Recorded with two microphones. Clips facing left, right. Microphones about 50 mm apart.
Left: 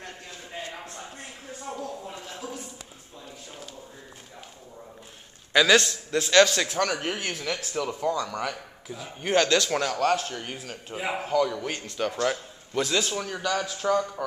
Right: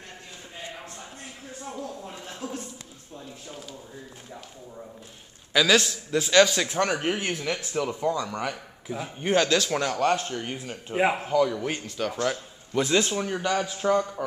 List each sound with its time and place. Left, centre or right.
1.7 s a sound: centre
5.5 s a man's voice: centre
6.7 s a man's voice: centre
9.9 s speech: centre
10.3 s speech: centre
12.8 s speech: right